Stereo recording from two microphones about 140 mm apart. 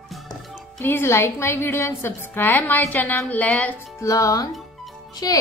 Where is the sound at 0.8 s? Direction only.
15° left (ahead or behind).